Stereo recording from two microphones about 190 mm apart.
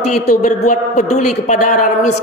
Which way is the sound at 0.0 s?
40° left (ahead or behind).